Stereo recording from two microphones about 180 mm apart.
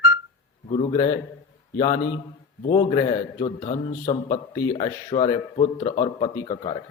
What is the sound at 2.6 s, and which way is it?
Speech, 30° left (ahead or behind).